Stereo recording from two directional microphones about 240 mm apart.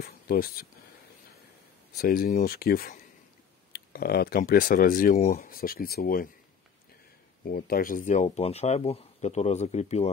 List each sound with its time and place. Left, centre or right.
0.0 s speech: left
2.0 s speech: left
7.4 s speech: left